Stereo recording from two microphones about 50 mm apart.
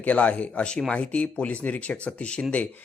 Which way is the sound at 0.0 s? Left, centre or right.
Left.